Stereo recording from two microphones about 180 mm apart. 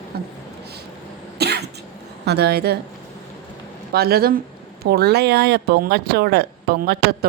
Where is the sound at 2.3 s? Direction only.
65° right (ahead or behind).